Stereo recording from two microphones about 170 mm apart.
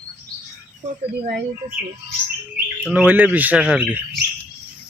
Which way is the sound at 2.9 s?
5° right (ahead or behind).